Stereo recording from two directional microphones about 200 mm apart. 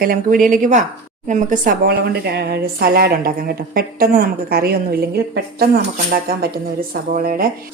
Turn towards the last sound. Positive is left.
turn(degrees=-45)  # may be behind; listen again after turning